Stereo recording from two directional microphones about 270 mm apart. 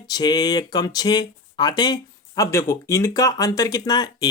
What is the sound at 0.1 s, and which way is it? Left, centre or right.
Speech, centre.